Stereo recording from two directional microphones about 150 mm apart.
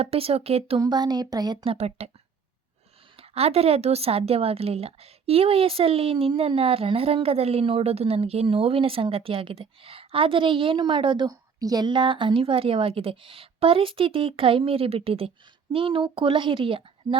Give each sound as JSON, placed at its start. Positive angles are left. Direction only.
{"t": 0.0, "sound": "a woman's voice", "side_deg": -40}
{"t": 0.8, "sound": "speech", "side_deg": -30}
{"t": 1.6, "sound": "a woman's voice", "side_deg": -40}
{"t": 3.2, "sound": "a woman's voice", "side_deg": -45}